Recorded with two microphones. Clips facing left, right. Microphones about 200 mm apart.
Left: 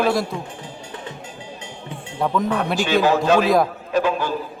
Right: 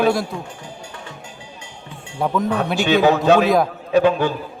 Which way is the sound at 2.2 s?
5° right (ahead or behind).